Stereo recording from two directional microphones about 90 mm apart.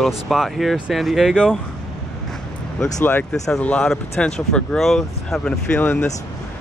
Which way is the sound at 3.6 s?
15° left (ahead or behind).